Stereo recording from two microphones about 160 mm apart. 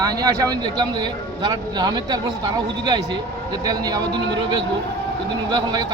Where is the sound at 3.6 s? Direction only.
25° right (ahead or behind).